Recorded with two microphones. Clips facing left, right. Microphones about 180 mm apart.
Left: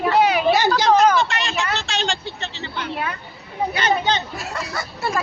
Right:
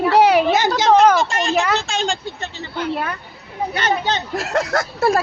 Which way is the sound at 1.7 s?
45° right (ahead or behind).